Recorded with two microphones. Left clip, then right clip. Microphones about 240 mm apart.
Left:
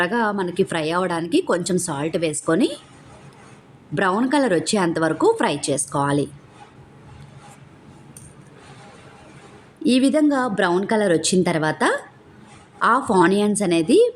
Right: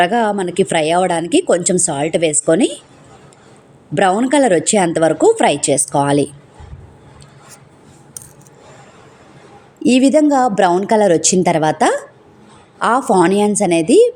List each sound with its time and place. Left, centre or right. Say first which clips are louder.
0.0 s a woman's voice: right 7 dB; centre
3.9 s a woman's voice: right 6 dB; centre
9.8 s a woman's voice: right 6 dB; centre